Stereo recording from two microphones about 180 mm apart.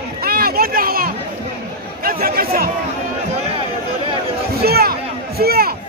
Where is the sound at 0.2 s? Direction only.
55° right (ahead or behind).